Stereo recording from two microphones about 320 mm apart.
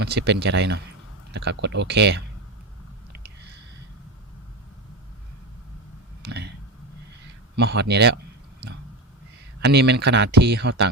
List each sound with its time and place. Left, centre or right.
0.0 s speech: right
6.2 s a sound: right
7.5 s speech: right
9.6 s speech: right